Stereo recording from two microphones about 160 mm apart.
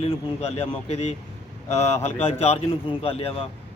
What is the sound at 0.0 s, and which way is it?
Speech, 40° left (ahead or behind).